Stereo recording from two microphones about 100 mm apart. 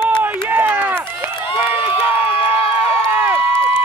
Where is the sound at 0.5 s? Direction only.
20° right (ahead or behind).